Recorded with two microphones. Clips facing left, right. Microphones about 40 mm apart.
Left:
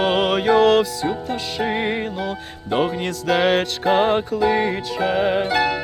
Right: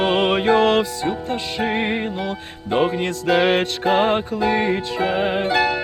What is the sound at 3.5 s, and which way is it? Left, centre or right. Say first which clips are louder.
Music: even; centre.